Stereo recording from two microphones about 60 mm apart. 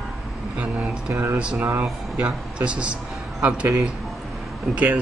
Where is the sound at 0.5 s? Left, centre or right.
Right.